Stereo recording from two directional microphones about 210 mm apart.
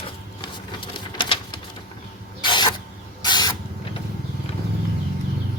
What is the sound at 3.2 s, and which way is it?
Spray, 20° left (ahead or behind).